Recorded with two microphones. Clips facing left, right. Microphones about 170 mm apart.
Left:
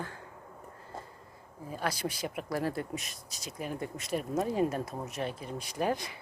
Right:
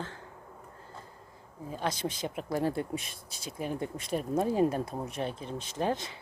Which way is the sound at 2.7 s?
30° right (ahead or behind).